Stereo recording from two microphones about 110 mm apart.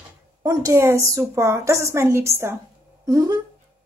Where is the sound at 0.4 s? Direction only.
30° right (ahead or behind).